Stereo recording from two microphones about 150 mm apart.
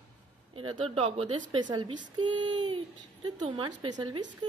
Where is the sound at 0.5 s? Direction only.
40° right (ahead or behind).